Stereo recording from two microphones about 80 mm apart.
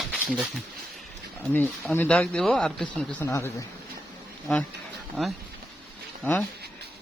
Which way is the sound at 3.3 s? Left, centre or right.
Left.